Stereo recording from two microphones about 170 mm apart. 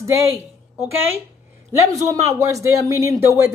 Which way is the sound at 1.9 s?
20° right (ahead or behind).